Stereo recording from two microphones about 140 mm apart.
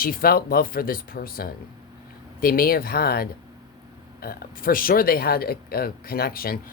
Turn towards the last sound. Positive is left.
turn(degrees=90)